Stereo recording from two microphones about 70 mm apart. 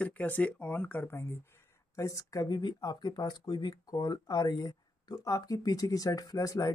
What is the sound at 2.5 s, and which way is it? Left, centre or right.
Speech, left.